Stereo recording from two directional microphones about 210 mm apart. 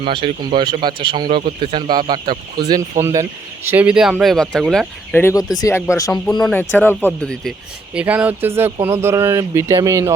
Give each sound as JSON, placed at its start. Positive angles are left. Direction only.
{"t": 0.0, "sound": "speech", "side_deg": -25}
{"t": 7.9, "sound": "speech", "side_deg": -5}